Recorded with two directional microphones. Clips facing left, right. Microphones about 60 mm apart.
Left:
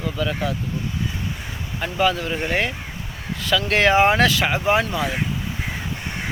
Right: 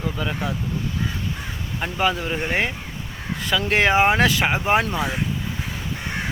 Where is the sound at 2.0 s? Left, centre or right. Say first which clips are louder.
Left 2 dB; right.